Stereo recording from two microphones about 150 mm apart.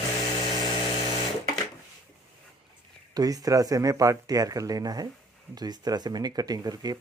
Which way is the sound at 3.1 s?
25° right (ahead or behind).